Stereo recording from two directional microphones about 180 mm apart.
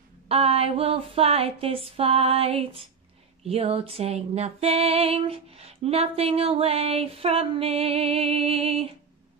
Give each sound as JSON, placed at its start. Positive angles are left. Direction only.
{"t": 0.3, "sound": "female singing", "side_deg": -35}